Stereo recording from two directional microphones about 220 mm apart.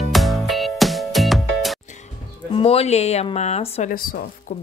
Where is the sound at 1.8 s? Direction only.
30° left (ahead or behind).